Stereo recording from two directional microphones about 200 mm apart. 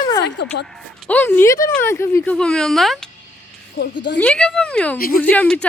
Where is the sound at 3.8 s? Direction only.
60° left (ahead or behind).